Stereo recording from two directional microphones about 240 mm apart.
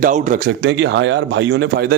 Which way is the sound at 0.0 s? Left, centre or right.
Right.